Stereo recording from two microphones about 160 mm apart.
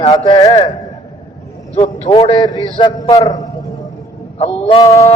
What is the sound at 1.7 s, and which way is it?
Speech, 45° left (ahead or behind).